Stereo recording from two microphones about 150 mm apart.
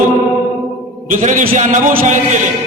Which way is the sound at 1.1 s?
60° right (ahead or behind).